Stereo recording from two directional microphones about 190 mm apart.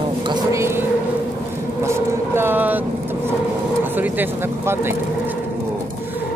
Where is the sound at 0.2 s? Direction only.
20° right (ahead or behind).